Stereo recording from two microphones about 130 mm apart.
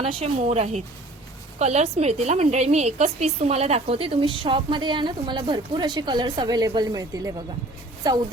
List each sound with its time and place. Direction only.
0.0 s a woman's voice: 45° right (ahead or behind)